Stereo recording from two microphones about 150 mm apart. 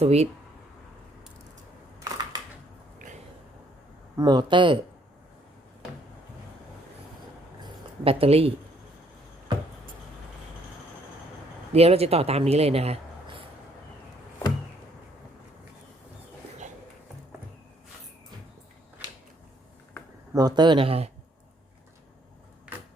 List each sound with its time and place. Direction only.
0.0 s speech: 45° right (ahead or behind)
2.0 s camera: 25° right (ahead or behind)
4.2 s speech: 30° right (ahead or behind)
7.6 s a sound: 40° right (ahead or behind)
11.7 s speech: 45° right (ahead or behind)
20.3 s speech: 25° right (ahead or behind)